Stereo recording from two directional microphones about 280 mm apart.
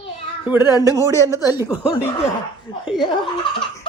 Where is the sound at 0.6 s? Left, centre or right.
Centre.